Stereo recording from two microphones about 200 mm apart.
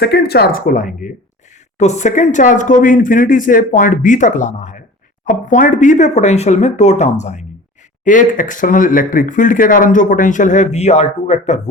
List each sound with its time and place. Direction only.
0.0 s speech: 55° left (ahead or behind); by 11.6 s 35° left (ahead or behind)